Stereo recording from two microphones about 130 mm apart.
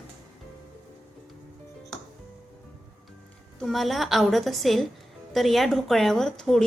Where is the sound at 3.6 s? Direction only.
Centre (ahead or behind).